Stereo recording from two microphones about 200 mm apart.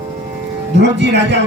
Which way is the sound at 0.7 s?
60° right (ahead or behind).